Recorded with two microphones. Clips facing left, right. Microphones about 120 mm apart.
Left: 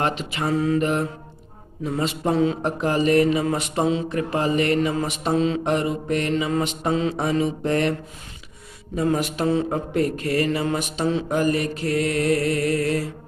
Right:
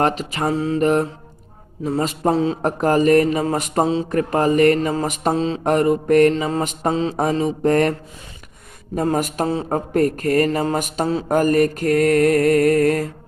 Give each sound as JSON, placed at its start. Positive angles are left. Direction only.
{"t": 0.0, "sound": "mantra", "side_deg": -40}
{"t": 1.8, "sound": "speech", "side_deg": -40}
{"t": 6.3, "sound": "mantra", "side_deg": -35}
{"t": 9.0, "sound": "speech", "side_deg": -45}